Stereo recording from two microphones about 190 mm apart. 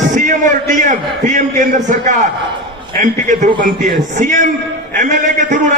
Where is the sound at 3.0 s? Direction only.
40° right (ahead or behind).